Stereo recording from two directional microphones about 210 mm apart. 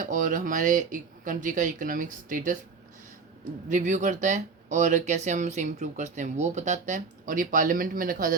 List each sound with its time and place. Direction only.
0.0 s speech: 40° right (ahead or behind)
3.7 s speech: 35° right (ahead or behind)